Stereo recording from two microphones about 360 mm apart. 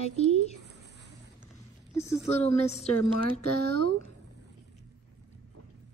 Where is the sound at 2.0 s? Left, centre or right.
Centre.